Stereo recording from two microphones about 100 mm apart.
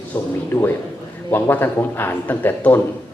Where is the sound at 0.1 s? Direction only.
20° left (ahead or behind).